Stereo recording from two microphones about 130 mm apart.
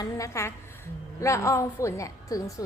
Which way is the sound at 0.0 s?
25° left (ahead or behind).